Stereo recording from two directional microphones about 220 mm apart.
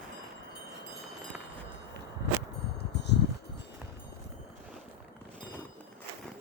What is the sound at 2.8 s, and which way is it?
Wind chime, 50° left (ahead or behind).